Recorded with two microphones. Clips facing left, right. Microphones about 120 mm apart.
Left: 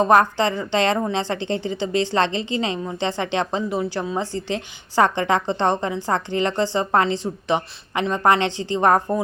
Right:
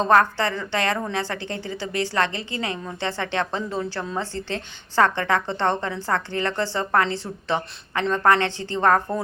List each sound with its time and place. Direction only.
0.0 s a woman's voice: 15° left (ahead or behind)